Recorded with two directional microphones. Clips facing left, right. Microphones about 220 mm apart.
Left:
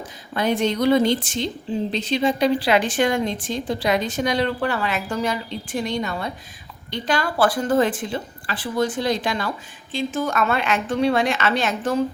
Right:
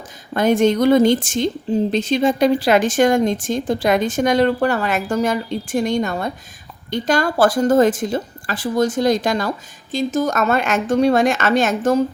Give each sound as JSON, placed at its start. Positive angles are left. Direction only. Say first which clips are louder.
{"t": 0.3, "sound": "a woman's voice", "louder": "right 6 dB", "side_deg": -45}